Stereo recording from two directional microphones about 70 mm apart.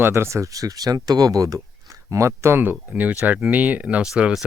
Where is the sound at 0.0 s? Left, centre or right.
Right.